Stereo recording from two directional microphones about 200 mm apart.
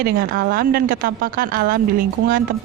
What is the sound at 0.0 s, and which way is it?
A woman's voice, 45° right (ahead or behind).